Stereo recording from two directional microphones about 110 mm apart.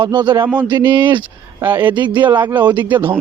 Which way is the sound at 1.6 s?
15° right (ahead or behind).